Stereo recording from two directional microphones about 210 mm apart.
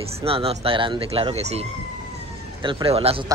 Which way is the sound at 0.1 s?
25° right (ahead or behind).